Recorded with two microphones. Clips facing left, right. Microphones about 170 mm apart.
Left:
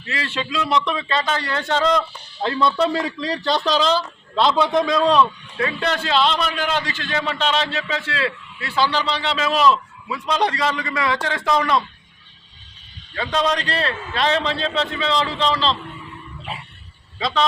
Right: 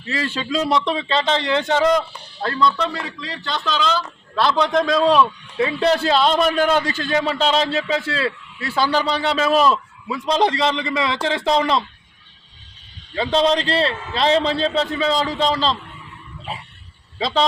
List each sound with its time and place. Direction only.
0.5 s a man's voice: 35° right (ahead or behind); by 2.0 s 10° right (ahead or behind)
2.6 s speech: 30° left (ahead or behind)
4.5 s a man's voice: 5° left (ahead or behind)
5.8 s a man's voice: 35° right (ahead or behind)
13.1 s a man's voice: 30° right (ahead or behind)
17.2 s a man's voice: 30° right (ahead or behind)